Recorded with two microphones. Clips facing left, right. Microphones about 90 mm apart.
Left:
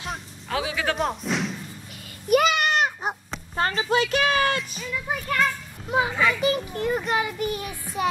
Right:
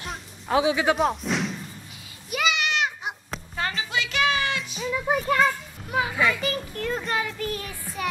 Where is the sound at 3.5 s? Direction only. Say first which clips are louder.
Left 6 dB; 40° left (ahead or behind).